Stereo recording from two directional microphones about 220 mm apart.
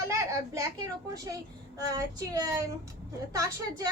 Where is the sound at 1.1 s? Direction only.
15° right (ahead or behind).